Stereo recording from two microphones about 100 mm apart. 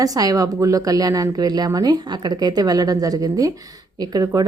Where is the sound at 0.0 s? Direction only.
35° right (ahead or behind).